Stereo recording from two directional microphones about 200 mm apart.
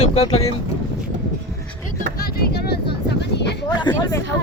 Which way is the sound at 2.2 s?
55° left (ahead or behind).